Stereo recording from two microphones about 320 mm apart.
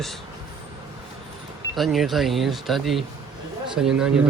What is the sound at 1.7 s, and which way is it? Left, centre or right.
Speech, centre.